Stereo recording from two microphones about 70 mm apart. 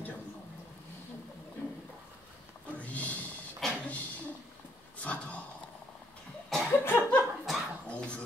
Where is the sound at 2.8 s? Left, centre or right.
Left.